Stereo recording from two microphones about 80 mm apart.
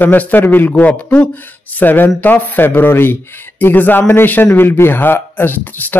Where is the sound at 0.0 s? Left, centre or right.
Left.